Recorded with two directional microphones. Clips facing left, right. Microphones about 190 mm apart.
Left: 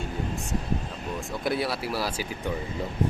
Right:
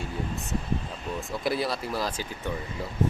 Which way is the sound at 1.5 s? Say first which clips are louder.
Left 1 dB; centre (ahead or behind).